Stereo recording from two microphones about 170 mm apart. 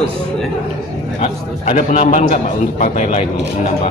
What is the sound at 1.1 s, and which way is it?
A man's voice, 40° left (ahead or behind).